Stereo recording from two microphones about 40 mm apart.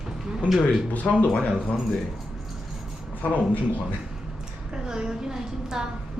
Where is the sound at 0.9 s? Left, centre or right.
Left.